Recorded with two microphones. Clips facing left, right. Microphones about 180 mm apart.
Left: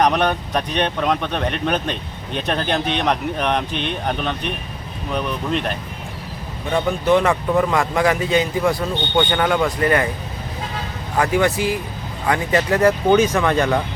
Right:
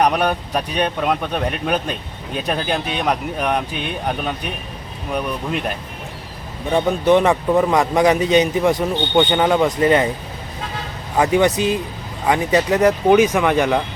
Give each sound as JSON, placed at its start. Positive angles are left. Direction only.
{"t": 0.0, "sound": "speech", "side_deg": -10}
{"t": 6.7, "sound": "a man's voice", "side_deg": -20}
{"t": 11.2, "sound": "a man's voice", "side_deg": -20}